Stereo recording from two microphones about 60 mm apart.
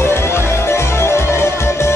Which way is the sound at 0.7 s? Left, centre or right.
Left.